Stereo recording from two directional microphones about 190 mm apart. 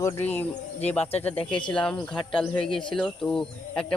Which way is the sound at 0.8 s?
10° left (ahead or behind).